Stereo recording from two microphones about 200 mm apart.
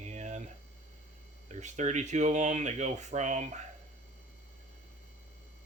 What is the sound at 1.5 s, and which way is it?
Speech, 35° right (ahead or behind).